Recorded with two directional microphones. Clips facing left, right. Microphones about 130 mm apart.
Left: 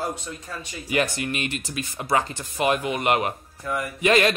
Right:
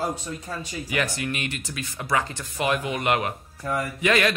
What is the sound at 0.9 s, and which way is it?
A man's voice, 30° left (ahead or behind).